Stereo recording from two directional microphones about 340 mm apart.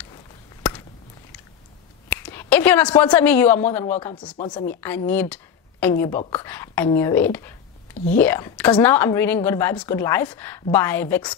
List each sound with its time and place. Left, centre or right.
0.6 s a sound: centre
2.0 s a woman's voice: centre
4.4 s a woman's voice: centre
4.6 s a woman's voice: centre